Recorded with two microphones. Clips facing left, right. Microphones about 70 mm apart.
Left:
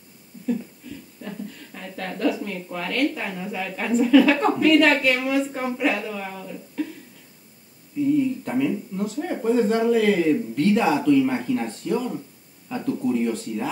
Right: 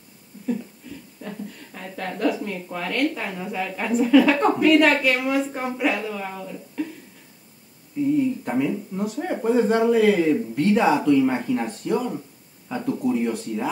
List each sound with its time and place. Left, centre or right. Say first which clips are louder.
1.2 s a sound: even; centre
2.2 s a woman's voice: even; centre
8.2 s a man's voice: even; centre